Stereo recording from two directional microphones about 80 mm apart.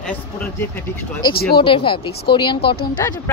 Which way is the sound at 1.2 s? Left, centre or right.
Left.